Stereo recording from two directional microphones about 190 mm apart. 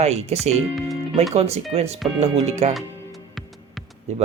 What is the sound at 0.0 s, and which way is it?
Speech, 35° right (ahead or behind).